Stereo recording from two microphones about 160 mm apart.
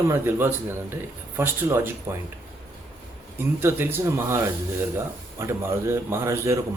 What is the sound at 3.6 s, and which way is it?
Speech, 15° right (ahead or behind).